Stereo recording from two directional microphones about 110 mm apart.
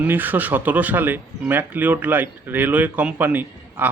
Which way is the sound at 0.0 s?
15° right (ahead or behind).